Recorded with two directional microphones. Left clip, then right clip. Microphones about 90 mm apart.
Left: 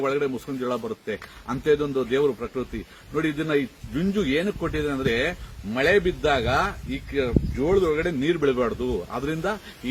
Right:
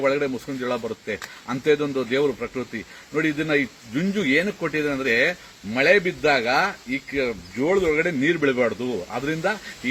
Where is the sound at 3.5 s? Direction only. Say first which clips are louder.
Right 2 dB; 30° left (ahead or behind).